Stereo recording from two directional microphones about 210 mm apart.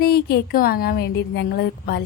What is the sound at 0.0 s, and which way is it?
A woman's voice, 45° left (ahead or behind).